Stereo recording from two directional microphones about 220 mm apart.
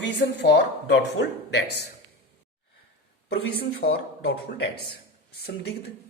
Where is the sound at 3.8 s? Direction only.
40° left (ahead or behind).